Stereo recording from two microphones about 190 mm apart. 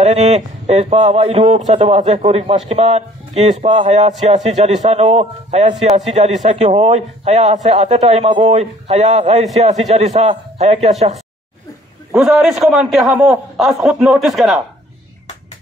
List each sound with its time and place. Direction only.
0.0 s a man's voice: 35° right (ahead or behind)
12.2 s speech: centre (ahead or behind)